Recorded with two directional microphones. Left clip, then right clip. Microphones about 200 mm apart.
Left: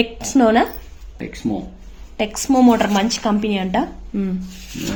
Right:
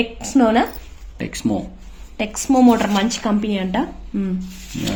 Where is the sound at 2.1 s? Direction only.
10° left (ahead or behind).